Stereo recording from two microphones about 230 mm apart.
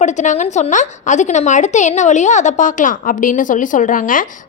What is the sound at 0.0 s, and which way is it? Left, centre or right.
A woman's voice, left.